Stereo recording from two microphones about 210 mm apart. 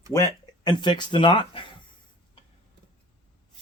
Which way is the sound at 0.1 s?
15° left (ahead or behind).